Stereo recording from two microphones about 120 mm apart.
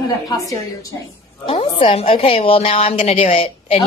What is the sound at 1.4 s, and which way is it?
A woman's voice, 50° left (ahead or behind).